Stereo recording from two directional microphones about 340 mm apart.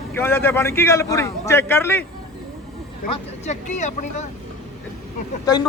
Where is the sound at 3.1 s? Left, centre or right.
Centre.